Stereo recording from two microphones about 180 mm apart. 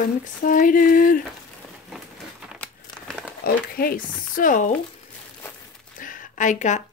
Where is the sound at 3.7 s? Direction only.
55° left (ahead or behind).